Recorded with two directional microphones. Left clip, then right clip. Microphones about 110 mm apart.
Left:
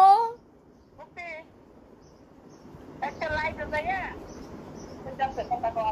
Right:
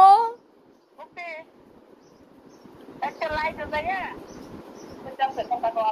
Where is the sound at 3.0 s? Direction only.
10° right (ahead or behind).